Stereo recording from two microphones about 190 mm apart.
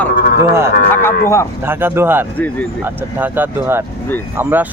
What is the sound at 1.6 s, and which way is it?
Speech, 10° right (ahead or behind).